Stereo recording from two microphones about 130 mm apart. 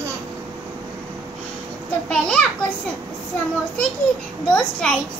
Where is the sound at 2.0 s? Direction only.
5° left (ahead or behind).